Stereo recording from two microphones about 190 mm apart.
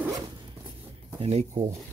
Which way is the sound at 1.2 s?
30° right (ahead or behind).